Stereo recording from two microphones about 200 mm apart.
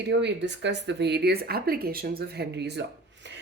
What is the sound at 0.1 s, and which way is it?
Speech, 60° right (ahead or behind).